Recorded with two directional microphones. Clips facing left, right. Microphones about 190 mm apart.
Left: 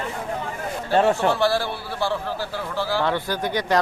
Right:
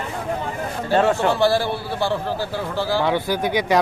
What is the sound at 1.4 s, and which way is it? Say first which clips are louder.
A man's voice: right 3 dB; 20° right (ahead or behind).